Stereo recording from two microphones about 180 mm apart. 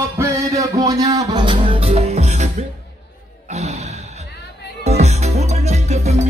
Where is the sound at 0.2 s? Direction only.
15° right (ahead or behind).